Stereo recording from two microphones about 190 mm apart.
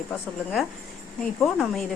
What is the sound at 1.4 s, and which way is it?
Speech, centre (ahead or behind).